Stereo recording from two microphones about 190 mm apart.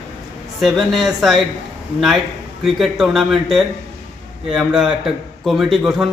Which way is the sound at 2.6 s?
Centre (ahead or behind).